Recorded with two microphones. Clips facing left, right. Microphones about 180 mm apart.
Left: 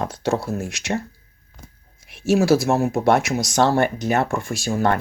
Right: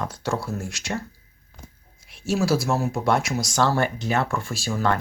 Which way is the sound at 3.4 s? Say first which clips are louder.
Left 4 dB; 20° left (ahead or behind).